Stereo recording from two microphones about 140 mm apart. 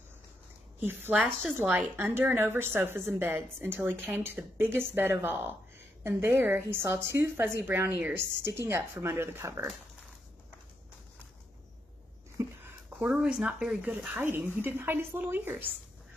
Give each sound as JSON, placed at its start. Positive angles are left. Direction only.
{"t": 0.7, "sound": "a woman's voice", "side_deg": -15}
{"t": 12.4, "sound": "a sound", "side_deg": -20}
{"t": 13.0, "sound": "a woman's voice", "side_deg": -5}